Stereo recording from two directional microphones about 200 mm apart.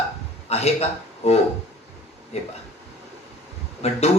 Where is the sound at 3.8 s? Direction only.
30° left (ahead or behind).